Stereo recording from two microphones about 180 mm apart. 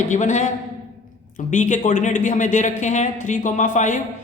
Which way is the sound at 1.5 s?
40° left (ahead or behind).